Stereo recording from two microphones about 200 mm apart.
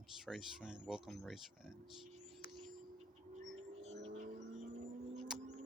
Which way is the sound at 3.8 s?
30° right (ahead or behind).